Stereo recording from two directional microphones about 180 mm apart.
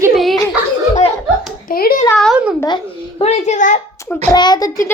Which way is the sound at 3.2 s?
40° left (ahead or behind).